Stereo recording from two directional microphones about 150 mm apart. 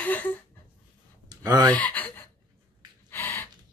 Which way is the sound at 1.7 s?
10° left (ahead or behind).